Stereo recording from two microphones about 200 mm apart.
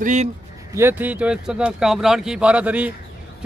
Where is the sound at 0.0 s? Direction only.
35° right (ahead or behind).